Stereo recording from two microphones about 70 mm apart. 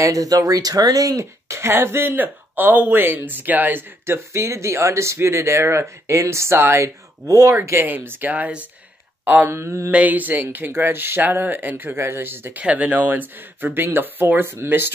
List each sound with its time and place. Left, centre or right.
0.0 s speech: right
1.6 s speech: right
4.0 s speech: right
7.8 s speech: right
9.5 s mantra: right
9.8 s speech: right
12.6 s speech: right